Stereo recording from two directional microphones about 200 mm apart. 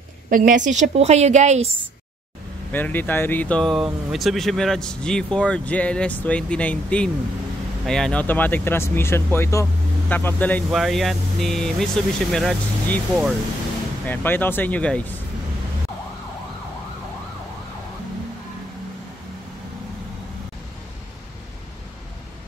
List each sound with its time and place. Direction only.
0.3 s a woman's voice: 40° right (ahead or behind)
2.7 s speech: 10° left (ahead or behind)